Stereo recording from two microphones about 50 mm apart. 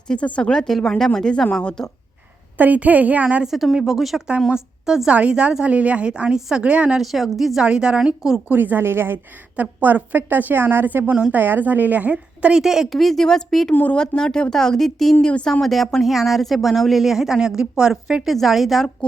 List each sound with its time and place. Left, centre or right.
0.1 s speech: left
2.6 s a woman's voice: right
3.4 s a woman's voice: centre
5.1 s a woman's voice: right
7.0 s speech: centre
7.6 s a woman's voice: centre
8.4 s a woman's voice: right
9.6 s a woman's voice: right
11.1 s a woman's voice: right
11.3 s a woman's voice: right
12.6 s a woman's voice: centre
12.9 s speech: centre
18.3 s speech: centre